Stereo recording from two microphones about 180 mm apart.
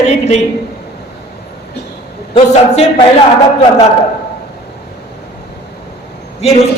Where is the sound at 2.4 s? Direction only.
35° left (ahead or behind).